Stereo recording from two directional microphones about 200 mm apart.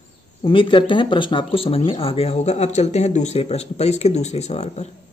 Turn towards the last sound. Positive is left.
turn(degrees=35)  # may be behind; listen again after turning